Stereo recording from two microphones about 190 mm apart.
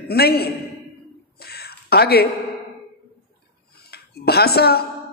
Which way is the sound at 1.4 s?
55° left (ahead or behind).